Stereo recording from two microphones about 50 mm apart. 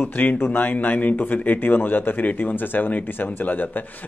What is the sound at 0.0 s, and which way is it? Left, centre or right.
Speech, left.